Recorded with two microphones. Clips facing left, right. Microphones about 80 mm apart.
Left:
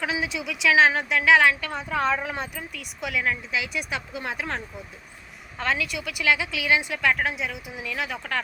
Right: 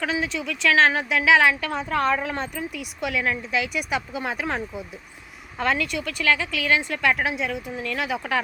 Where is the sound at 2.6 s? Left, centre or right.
Centre.